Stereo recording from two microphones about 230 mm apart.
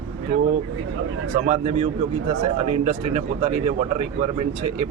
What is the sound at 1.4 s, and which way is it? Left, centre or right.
Speech, right.